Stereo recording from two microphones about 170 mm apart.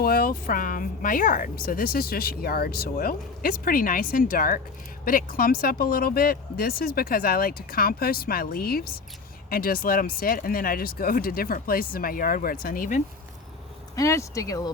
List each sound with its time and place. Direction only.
0.0 s speech: 60° left (ahead or behind)
13.9 s speech: 20° left (ahead or behind)